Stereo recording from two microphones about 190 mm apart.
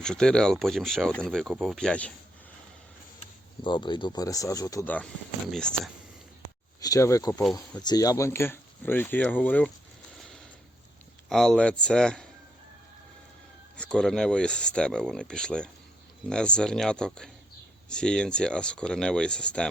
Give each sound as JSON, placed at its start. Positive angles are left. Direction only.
{"t": 0.0, "sound": "speech", "side_deg": 5}
{"t": 3.6, "sound": "speech", "side_deg": 25}
{"t": 6.7, "sound": "speech", "side_deg": 20}
{"t": 11.3, "sound": "speech", "side_deg": 5}
{"t": 13.7, "sound": "speech", "side_deg": 5}